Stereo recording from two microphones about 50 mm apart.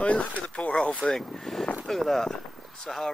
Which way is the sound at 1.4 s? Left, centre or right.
Centre.